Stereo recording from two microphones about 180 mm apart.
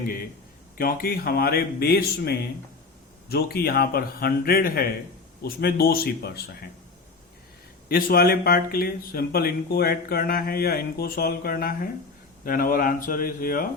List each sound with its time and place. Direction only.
0.8 s speech: 55° left (ahead or behind)
7.9 s speech: 55° left (ahead or behind)